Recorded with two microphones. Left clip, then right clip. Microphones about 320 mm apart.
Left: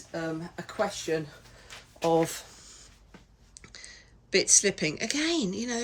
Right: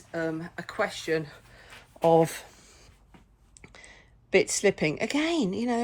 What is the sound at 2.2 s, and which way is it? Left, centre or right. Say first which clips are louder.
Speech: right 2 dB; right.